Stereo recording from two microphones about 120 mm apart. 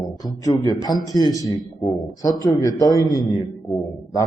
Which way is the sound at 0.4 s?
30° left (ahead or behind).